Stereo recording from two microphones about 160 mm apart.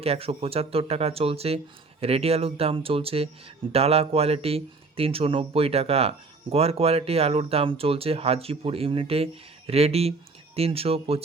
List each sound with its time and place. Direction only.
0.0 s speech: 40° right (ahead or behind)